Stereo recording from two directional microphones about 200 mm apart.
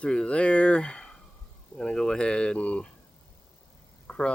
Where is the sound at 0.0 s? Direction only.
5° left (ahead or behind).